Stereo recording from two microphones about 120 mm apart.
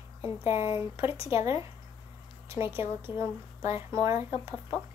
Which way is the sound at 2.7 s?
20° right (ahead or behind).